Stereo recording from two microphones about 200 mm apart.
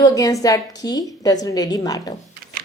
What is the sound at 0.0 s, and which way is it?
Speech, 15° left (ahead or behind).